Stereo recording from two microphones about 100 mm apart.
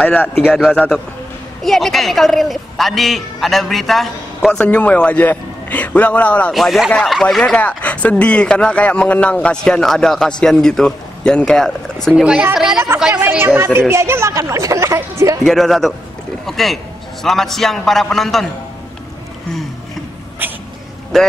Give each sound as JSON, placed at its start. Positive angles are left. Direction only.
{"t": 0.0, "sound": "a woman's voice", "side_deg": 15}
{"t": 6.5, "sound": "a woman's voice", "side_deg": 0}
{"t": 13.0, "sound": "a woman's voice", "side_deg": -10}
{"t": 15.4, "sound": "a woman's voice", "side_deg": 0}
{"t": 21.1, "sound": "a woman's voice", "side_deg": 5}